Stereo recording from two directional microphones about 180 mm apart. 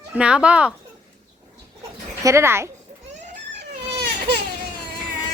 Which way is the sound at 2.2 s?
15° right (ahead or behind).